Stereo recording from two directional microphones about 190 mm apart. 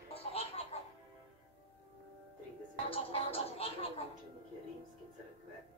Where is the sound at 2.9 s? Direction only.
30° left (ahead or behind).